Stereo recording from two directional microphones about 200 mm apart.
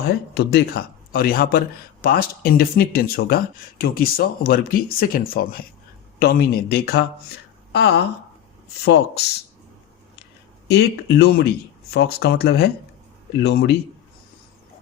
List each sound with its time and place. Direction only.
0.0 s speech: 55° left (ahead or behind)
10.7 s speech: 55° left (ahead or behind)